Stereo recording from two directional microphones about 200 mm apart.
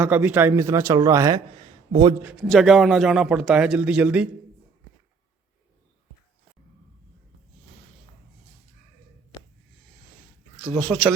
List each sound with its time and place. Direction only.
0.0 s a man's voice: 10° right (ahead or behind)
2.3 s a man's voice: centre (ahead or behind)
10.8 s speech: 10° left (ahead or behind)